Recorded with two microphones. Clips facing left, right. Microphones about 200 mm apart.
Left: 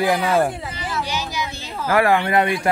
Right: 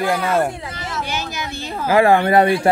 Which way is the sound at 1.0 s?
55° right (ahead or behind).